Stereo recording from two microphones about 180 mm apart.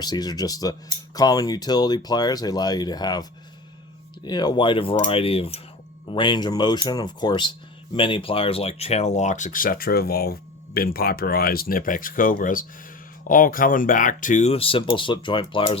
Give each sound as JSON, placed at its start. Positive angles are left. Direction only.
{"t": 0.0, "sound": "speech", "side_deg": 20}